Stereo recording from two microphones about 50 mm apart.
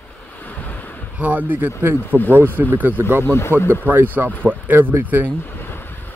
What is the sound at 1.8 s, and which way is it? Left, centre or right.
Speech, right.